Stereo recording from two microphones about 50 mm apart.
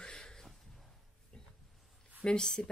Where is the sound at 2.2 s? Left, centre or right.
Centre.